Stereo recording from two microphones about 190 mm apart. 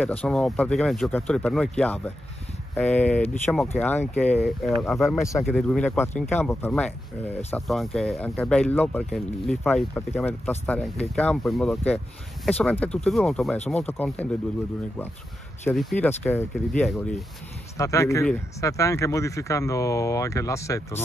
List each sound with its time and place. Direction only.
0.0 s speech: 10° left (ahead or behind)
15.7 s speech: centre (ahead or behind)
17.7 s speech: 15° left (ahead or behind)